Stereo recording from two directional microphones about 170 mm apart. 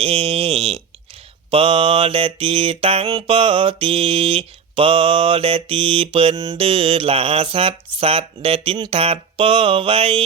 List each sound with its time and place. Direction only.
0.0 s mantra: 35° right (ahead or behind)